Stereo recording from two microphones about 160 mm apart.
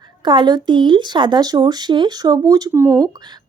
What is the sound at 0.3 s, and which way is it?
A woman's voice, 30° right (ahead or behind).